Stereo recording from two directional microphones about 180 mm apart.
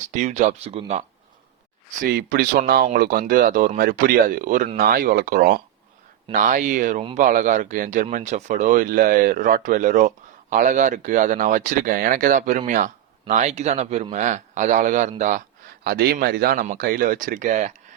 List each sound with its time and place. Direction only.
0.1 s speech: 40° right (ahead or behind)
2.0 s speech: 55° right (ahead or behind)
15.8 s a man's voice: 60° right (ahead or behind); by 17.7 s 40° right (ahead or behind)